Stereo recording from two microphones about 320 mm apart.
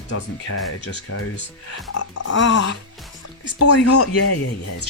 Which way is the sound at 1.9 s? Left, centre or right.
Left.